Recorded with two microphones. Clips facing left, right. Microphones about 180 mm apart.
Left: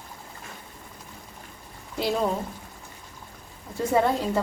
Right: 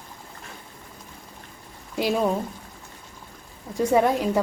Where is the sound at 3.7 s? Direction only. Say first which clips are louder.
Right 3 dB; 15° right (ahead or behind).